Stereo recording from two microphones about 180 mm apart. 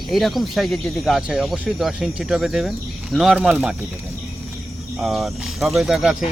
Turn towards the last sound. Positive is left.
turn(degrees=-5)  # may be behind; listen again after turning